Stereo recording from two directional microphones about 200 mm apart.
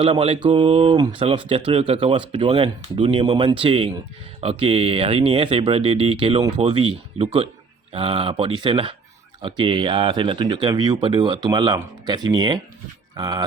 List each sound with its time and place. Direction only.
0.0 s speech: 30° right (ahead or behind)